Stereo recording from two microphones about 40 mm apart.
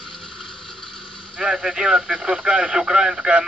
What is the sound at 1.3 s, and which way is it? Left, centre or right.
Speech, right.